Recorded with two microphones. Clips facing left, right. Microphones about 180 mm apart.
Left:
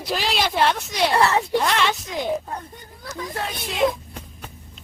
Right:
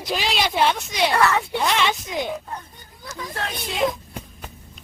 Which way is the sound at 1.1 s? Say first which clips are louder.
Left 1 dB; 30° left (ahead or behind).